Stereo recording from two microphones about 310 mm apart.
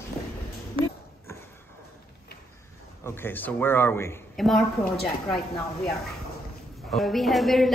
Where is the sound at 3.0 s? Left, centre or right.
Centre.